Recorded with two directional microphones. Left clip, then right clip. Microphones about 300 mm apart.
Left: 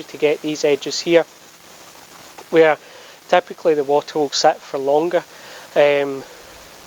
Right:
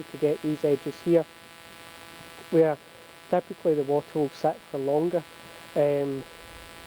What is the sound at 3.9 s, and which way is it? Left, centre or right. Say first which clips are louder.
Speech: left 9 dB; left.